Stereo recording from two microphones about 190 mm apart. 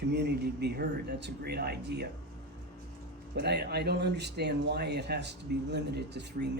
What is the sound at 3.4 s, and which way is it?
Speech, 60° right (ahead or behind).